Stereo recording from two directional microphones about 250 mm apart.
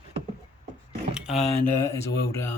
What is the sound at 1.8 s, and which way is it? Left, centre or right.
Speech, centre.